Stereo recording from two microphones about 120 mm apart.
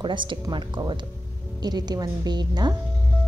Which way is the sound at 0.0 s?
40° right (ahead or behind).